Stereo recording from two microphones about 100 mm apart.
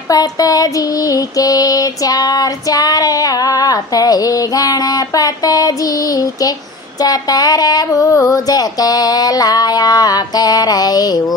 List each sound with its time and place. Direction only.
0.1 s female singing: 40° left (ahead or behind)